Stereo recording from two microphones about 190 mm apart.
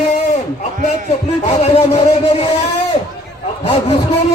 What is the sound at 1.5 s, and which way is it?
Speech, 35° left (ahead or behind).